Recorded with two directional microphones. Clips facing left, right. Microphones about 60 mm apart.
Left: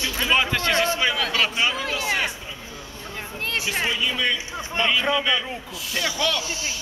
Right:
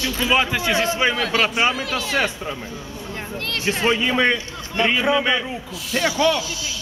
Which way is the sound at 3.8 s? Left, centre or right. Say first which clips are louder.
Right 8 dB; right.